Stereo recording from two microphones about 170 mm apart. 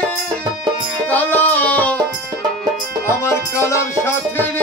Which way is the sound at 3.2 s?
15° left (ahead or behind).